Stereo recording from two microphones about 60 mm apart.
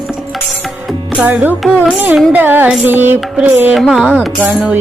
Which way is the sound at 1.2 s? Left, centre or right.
Right.